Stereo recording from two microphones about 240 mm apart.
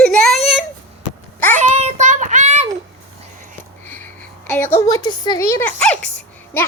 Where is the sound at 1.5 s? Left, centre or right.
Right.